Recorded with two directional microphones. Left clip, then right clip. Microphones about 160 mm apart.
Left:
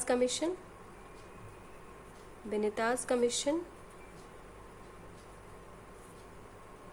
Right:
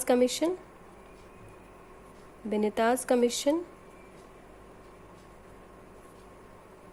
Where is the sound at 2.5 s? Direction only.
35° right (ahead or behind).